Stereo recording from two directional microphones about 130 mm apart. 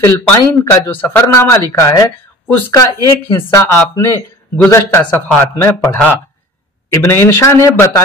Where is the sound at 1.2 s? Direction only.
20° left (ahead or behind).